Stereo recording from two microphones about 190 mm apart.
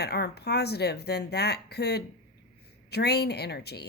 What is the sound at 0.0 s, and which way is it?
Speech, 60° left (ahead or behind).